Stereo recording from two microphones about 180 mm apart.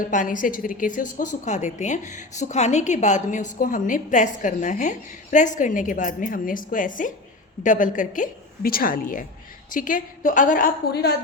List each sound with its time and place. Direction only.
0.0 s a woman's voice: 50° left (ahead or behind)